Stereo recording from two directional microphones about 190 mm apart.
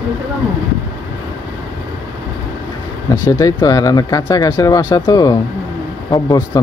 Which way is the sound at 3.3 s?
20° left (ahead or behind).